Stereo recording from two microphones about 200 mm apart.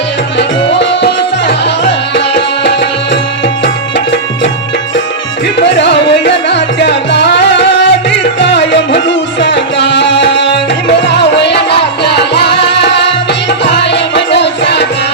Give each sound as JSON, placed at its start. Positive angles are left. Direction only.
{"t": 0.3, "sound": "music", "side_deg": 60}
{"t": 5.5, "sound": "music", "side_deg": 60}